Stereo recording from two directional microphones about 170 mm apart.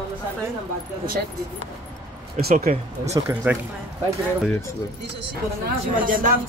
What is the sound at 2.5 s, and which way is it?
Speech, 40° right (ahead or behind).